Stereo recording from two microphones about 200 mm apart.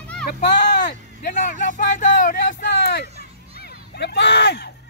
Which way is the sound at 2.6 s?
55° left (ahead or behind).